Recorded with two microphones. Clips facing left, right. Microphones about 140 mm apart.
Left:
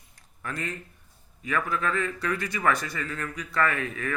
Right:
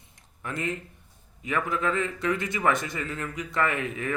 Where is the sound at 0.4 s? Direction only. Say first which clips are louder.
Right 3 dB; 20° right (ahead or behind).